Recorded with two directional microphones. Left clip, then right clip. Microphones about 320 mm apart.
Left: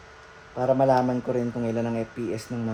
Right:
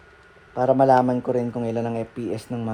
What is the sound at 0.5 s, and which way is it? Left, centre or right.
Speech, right.